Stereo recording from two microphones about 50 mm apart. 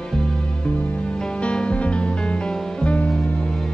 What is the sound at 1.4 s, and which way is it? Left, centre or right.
Music, left.